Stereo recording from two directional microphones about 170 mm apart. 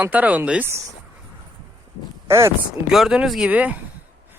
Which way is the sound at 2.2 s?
15° right (ahead or behind).